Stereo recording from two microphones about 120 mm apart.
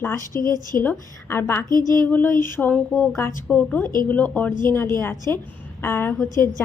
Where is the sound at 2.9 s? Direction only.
Centre (ahead or behind).